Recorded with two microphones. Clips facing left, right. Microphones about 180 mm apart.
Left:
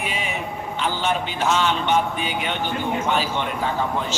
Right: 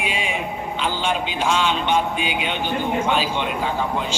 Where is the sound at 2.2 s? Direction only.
90° right.